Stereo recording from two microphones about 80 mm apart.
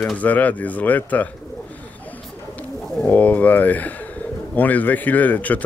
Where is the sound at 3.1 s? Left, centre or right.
Centre.